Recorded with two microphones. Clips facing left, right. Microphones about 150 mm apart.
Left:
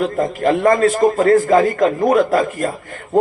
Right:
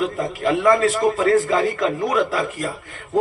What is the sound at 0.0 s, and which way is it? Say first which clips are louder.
A man's voice: left 5 dB; 50° left (ahead or behind).